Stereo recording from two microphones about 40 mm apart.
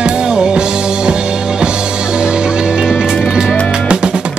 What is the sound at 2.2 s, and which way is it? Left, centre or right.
Music, right.